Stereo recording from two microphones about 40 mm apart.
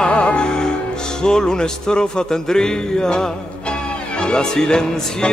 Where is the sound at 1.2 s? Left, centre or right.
Centre.